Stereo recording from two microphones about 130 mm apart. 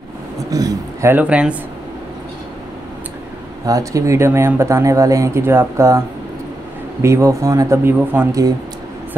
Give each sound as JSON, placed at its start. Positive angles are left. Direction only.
{"t": 0.5, "sound": "speech", "side_deg": -25}
{"t": 1.1, "sound": "speech", "side_deg": -10}
{"t": 3.6, "sound": "speech", "side_deg": -25}
{"t": 8.3, "sound": "speech", "side_deg": -25}